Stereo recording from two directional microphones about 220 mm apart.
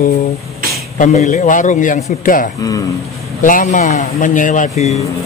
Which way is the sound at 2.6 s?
15° left (ahead or behind).